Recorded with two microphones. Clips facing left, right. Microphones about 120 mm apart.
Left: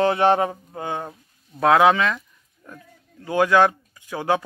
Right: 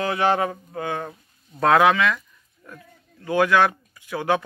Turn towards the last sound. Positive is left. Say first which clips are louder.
# even
turn(degrees=20)  # may be behind; listen again after turning